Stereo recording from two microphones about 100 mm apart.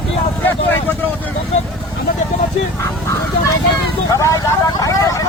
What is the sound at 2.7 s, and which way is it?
Fowl, 30° left (ahead or behind).